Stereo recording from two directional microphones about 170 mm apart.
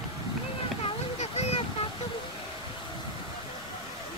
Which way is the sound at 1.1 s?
40° left (ahead or behind).